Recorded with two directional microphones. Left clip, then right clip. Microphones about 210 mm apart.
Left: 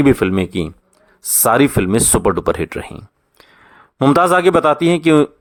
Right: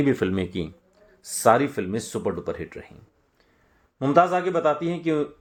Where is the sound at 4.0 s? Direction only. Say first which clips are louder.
Left 8 dB; 40° left (ahead or behind).